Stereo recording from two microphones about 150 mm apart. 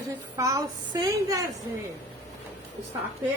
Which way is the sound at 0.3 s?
20° right (ahead or behind).